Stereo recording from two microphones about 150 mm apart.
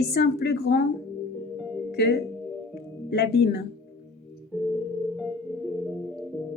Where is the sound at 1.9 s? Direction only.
90° left.